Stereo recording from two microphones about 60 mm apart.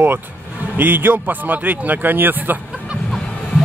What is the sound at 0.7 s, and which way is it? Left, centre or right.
Speech, right.